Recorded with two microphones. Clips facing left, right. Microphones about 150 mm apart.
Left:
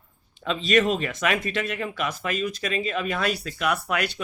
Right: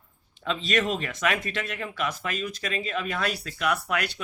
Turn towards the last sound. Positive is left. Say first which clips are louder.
# left 2 dB
turn(degrees=15)  # may be behind; listen again after turning